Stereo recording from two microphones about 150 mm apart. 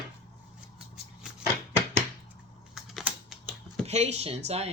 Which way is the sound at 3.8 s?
45° right (ahead or behind).